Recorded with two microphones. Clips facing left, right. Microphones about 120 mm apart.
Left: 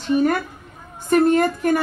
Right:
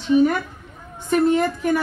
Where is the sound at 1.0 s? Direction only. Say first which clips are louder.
Left 2 dB; 50° left (ahead or behind).